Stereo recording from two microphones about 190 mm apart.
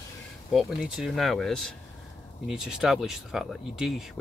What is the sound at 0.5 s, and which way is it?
Speech, centre (ahead or behind).